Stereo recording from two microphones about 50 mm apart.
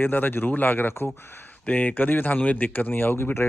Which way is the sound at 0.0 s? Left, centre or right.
Left.